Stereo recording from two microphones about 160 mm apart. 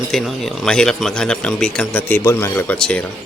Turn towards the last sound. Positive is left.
turn(degrees=5)  # may be behind; listen again after turning